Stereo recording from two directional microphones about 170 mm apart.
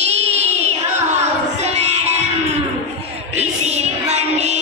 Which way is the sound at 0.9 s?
40° right (ahead or behind).